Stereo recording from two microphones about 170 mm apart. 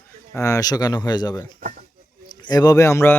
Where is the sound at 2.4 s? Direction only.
20° left (ahead or behind).